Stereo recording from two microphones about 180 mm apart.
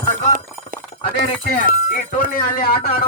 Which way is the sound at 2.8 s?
30° left (ahead or behind).